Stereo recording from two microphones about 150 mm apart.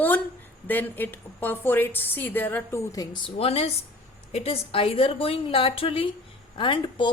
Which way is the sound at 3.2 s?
40° left (ahead or behind).